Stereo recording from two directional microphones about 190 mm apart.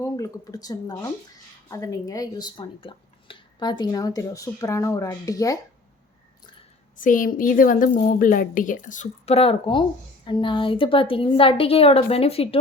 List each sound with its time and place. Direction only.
0.0 s speech: 20° left (ahead or behind)
6.9 s a woman's voice: 45° left (ahead or behind)